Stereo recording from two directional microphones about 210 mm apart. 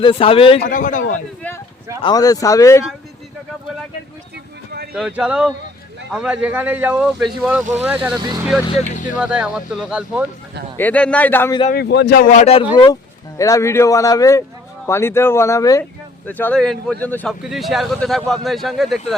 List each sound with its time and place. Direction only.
0.0 s a man's voice: 25° left (ahead or behind)
0.6 s speech: 40° left (ahead or behind)
1.4 s a sound: 10° left (ahead or behind)
2.0 s speech: 20° left (ahead or behind)
4.9 s speech: 5° right (ahead or behind)
7.6 s speech: 35° right (ahead or behind)
7.9 s speech: 5° right (ahead or behind)
8.7 s speech: 40° left (ahead or behind)
9.1 s speech: 5° right (ahead or behind)
10.8 s speech: 5° left (ahead or behind)
11.7 s speech: 50° left (ahead or behind); by 12.6 s 30° left (ahead or behind)
12.7 s speech: 20° left (ahead or behind); by 19.1 s centre (ahead or behind)